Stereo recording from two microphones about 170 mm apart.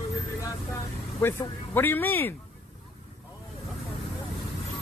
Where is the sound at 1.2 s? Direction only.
15° left (ahead or behind).